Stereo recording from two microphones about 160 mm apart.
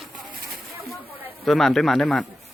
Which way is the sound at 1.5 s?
Centre (ahead or behind).